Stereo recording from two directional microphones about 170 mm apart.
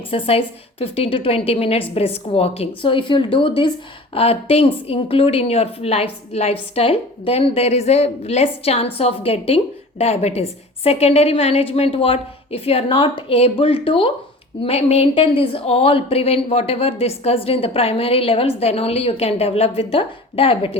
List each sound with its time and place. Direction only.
0.1 s a woman's voice: 35° left (ahead or behind)